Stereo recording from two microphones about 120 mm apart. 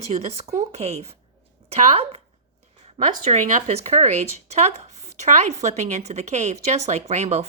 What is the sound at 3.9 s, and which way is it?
Speech, 75° right (ahead or behind).